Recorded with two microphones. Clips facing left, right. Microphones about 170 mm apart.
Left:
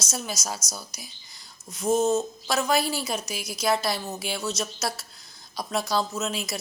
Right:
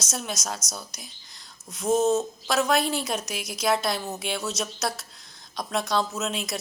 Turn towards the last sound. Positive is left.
turn(degrees=0)  # may be behind; listen again after turning